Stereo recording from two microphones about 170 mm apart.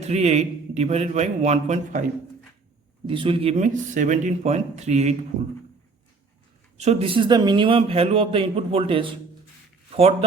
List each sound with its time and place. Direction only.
0.0 s a man's voice: 40° right (ahead or behind)
3.1 s a man's voice: 30° right (ahead or behind)
3.6 s a man's voice: 45° right (ahead or behind)
6.7 s a man's voice: 35° right (ahead or behind)